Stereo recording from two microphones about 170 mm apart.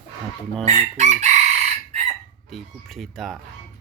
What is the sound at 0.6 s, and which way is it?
Chicken, 40° right (ahead or behind).